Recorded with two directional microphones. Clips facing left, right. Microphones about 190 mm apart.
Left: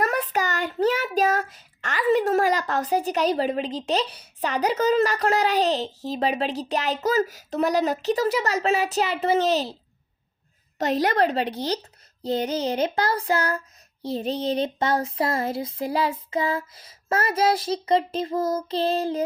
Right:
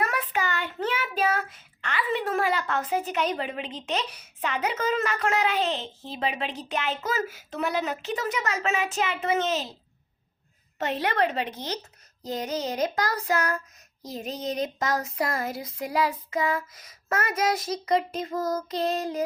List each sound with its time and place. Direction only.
0.0 s child singing: 40° left (ahead or behind)
10.8 s child singing: 40° left (ahead or behind)